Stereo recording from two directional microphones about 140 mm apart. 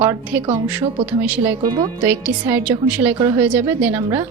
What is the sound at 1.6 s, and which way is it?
Speech, 30° right (ahead or behind).